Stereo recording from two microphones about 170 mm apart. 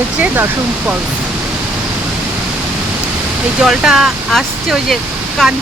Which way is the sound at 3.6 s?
5° right (ahead or behind).